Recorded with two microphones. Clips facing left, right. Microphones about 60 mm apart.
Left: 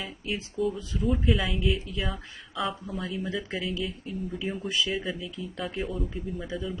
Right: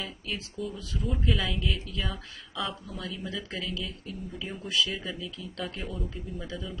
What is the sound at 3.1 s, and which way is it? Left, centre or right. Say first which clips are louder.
Speech: left 4 dB; centre.